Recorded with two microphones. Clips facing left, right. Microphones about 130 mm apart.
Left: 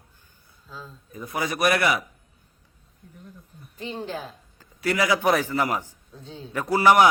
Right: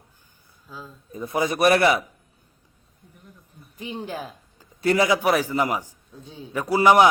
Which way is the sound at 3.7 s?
15° right (ahead or behind).